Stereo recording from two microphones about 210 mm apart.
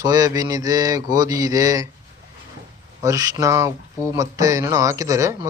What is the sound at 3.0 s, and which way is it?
Speech, 15° right (ahead or behind).